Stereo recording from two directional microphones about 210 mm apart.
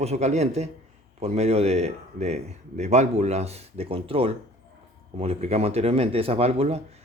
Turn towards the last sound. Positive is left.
turn(degrees=-30)  # may be behind; listen again after turning